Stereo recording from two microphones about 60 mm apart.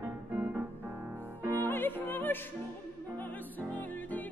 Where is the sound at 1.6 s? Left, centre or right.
Left.